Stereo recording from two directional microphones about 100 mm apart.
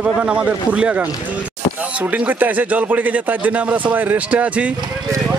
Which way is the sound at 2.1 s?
15° right (ahead or behind).